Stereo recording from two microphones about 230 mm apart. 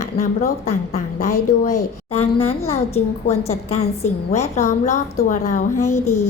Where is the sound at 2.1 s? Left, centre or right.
Left.